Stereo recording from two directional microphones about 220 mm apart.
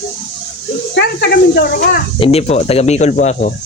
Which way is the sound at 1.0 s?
45° left (ahead or behind).